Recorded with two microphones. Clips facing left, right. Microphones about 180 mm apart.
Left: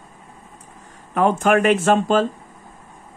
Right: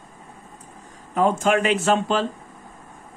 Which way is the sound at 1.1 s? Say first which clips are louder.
Left 3 dB; 65° left (ahead or behind).